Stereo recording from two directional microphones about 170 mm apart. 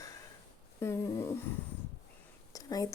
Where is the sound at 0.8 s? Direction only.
15° left (ahead or behind).